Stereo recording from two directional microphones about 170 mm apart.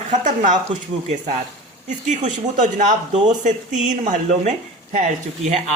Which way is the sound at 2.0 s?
45° right (ahead or behind).